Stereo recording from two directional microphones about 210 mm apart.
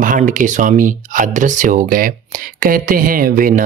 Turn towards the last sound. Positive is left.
turn(degrees=-40)  # may be behind; listen again after turning